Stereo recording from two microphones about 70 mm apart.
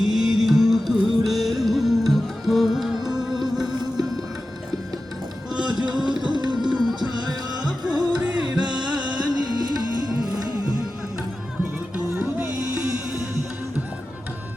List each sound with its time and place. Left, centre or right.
0.0 s carnatic music: centre
3.1 s music: centre
5.5 s music: centre
9.0 s music: right
12.1 s music: right